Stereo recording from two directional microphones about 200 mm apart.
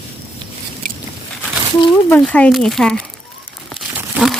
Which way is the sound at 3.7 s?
Centre (ahead or behind).